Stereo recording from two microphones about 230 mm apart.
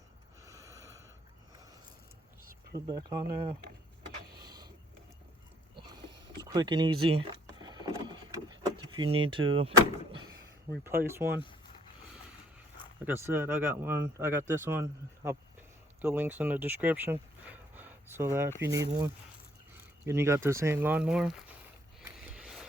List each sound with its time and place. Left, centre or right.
0.4 s a sound: centre
2.7 s speech: centre
4.4 s a sound: centre
6.5 s speech: centre
7.1 s vehicle: centre
9.5 s speech: right
10.8 s speech: centre
13.1 s speech: centre
22.0 s a sound: centre